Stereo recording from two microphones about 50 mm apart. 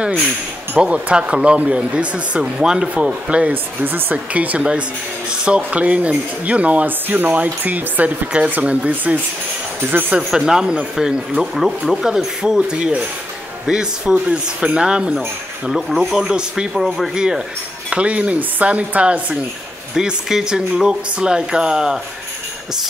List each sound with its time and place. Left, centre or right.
0.7 s speech: centre
3.8 s speech: right
4.3 s speech: right
9.8 s speech: right
10.3 s speech: centre
15.1 s speech: centre
16.7 s speech: centre
17.1 s speech: centre
20.0 s speech: centre